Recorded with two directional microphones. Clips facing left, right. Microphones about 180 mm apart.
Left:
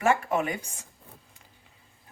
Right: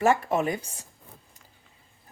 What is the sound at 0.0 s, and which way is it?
Speech, 35° right (ahead or behind).